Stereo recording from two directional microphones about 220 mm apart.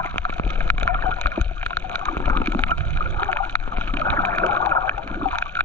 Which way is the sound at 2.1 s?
5° left (ahead or behind).